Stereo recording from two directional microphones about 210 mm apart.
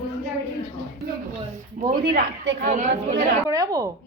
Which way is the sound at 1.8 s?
45° right (ahead or behind).